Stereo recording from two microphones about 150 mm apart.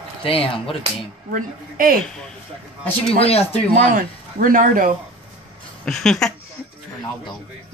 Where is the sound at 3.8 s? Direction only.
65° right (ahead or behind).